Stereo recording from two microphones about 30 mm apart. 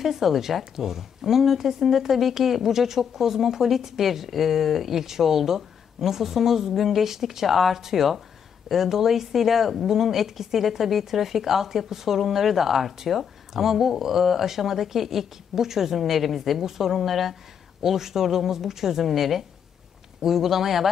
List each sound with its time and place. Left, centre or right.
0.0 s speech: centre